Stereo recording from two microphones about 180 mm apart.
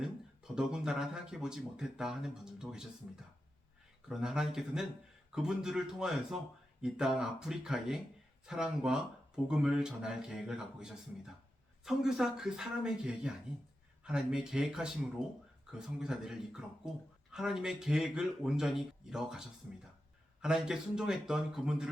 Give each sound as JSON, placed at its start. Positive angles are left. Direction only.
{"t": 0.0, "sound": "speech", "side_deg": -5}